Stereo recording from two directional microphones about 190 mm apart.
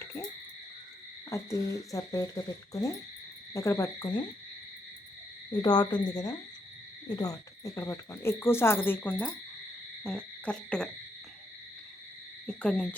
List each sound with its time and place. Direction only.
1.3 s speech: 15° left (ahead or behind)
5.5 s cricket: 20° left (ahead or behind)
7.1 s speech: 20° left (ahead or behind)
10.0 s hoot: 5° left (ahead or behind)
12.5 s speech: 5° left (ahead or behind)